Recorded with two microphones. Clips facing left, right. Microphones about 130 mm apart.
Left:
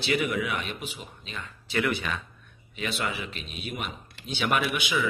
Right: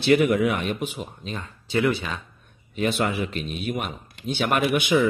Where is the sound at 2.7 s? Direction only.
45° right (ahead or behind).